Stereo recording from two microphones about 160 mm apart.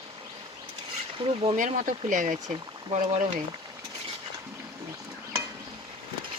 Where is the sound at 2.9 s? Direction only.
40° right (ahead or behind).